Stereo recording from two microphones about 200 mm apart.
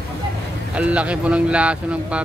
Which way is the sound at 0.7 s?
5° right (ahead or behind).